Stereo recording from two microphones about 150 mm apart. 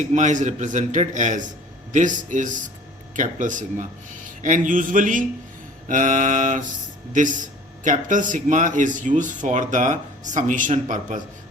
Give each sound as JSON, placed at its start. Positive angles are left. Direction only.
{"t": 0.0, "sound": "speech", "side_deg": -55}